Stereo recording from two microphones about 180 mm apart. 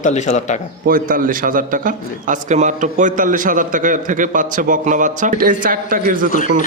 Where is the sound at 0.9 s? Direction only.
50° right (ahead or behind).